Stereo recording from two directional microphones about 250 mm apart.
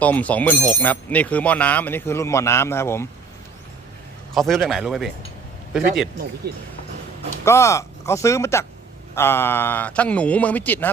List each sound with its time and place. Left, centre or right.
0.0 s speech: centre
4.4 s speech: centre
6.4 s speech: right
7.4 s speech: centre